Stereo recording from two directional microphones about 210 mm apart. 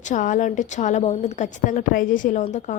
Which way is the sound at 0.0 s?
35° left (ahead or behind).